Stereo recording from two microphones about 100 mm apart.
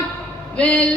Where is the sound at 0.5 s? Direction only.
10° left (ahead or behind).